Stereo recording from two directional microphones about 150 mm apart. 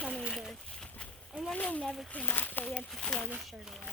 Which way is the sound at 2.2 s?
15° left (ahead or behind).